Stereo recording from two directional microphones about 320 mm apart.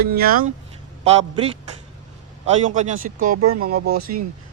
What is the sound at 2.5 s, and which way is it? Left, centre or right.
Speech, right.